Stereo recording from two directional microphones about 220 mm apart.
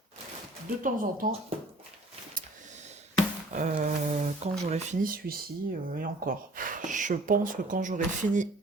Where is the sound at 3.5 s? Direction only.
35° right (ahead or behind).